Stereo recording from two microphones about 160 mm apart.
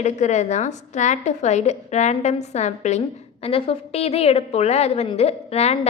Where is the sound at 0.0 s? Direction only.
50° left (ahead or behind).